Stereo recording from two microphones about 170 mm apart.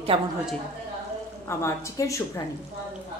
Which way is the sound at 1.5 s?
15° left (ahead or behind).